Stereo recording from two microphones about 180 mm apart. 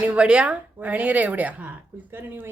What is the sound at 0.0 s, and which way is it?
Speech, 5° right (ahead or behind).